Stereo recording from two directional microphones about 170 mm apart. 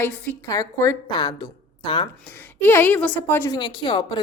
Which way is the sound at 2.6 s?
10° left (ahead or behind).